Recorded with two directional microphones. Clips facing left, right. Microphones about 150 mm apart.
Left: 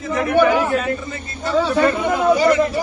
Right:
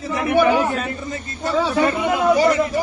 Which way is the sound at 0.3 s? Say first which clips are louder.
Left 1 dB; 15° right (ahead or behind).